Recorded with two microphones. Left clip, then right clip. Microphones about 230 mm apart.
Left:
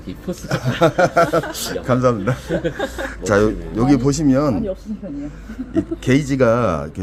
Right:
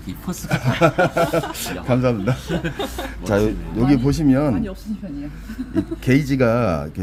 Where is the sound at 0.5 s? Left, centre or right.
Centre.